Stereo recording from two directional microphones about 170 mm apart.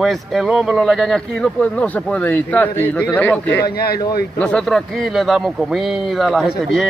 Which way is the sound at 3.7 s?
65° left (ahead or behind).